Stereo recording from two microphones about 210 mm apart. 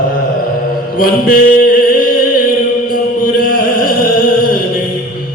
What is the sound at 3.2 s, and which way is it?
Chant, 45° left (ahead or behind).